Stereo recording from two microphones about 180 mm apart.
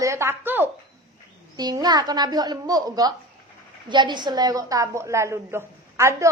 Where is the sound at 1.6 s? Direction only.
20° right (ahead or behind).